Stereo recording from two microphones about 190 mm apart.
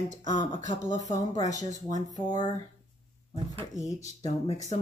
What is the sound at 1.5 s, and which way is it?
Speech, 40° right (ahead or behind).